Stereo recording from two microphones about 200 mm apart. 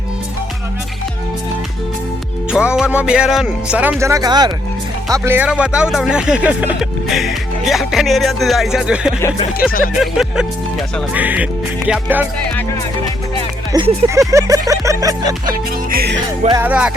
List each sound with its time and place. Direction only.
2.5 s speech: 5° right (ahead or behind)
11.9 s music: 10° right (ahead or behind)
13.7 s music: 15° right (ahead or behind)
15.4 s music: 45° right (ahead or behind)
16.5 s music: 10° right (ahead or behind)